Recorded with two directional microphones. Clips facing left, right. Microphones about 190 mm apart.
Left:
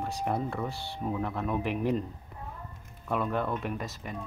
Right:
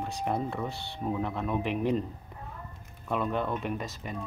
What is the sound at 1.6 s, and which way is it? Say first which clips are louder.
Speech: right 1 dB; 25° right (ahead or behind).